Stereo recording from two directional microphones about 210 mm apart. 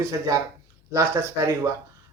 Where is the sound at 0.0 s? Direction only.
15° right (ahead or behind).